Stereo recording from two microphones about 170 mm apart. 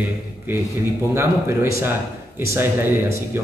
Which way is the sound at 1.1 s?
15° right (ahead or behind).